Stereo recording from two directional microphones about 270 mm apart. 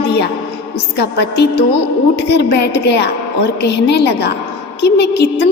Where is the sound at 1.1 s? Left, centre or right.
Left.